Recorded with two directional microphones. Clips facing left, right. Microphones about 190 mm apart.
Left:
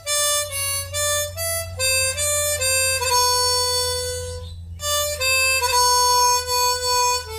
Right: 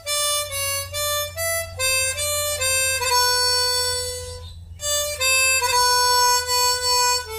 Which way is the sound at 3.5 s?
5° right (ahead or behind).